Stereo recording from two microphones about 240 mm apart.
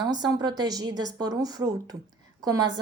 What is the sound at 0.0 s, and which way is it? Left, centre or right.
A woman's voice, centre.